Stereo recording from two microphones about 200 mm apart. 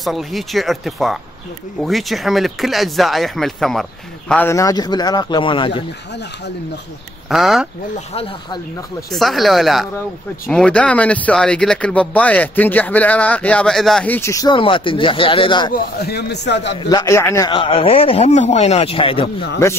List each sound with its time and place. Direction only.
0.0 s speech: centre (ahead or behind); by 5.9 s 25° left (ahead or behind)
7.2 s speech: centre (ahead or behind)
8.1 s speech: 30° left (ahead or behind)
9.1 s speech: centre (ahead or behind); by 15.7 s 25° left (ahead or behind)
15.7 s a man's voice: 50° left (ahead or behind)
16.9 s speech: 15° left (ahead or behind)
17.5 s speech: 25° left (ahead or behind)